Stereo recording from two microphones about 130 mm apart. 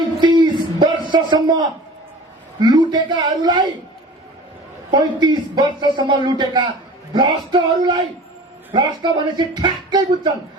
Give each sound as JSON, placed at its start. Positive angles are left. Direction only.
{"t": 0.2, "sound": "music", "side_deg": -35}
{"t": 2.6, "sound": "a man's voice", "side_deg": -35}
{"t": 4.9, "sound": "a man's voice", "side_deg": -35}